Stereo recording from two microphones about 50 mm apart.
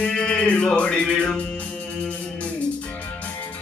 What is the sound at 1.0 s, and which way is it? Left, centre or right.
Music, centre.